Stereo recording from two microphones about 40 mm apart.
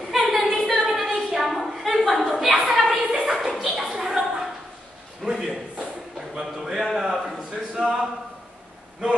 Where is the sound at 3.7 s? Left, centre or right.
Centre.